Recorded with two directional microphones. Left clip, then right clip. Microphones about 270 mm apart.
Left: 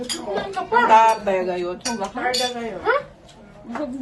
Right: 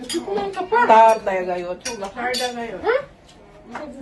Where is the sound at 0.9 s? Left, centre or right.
Centre.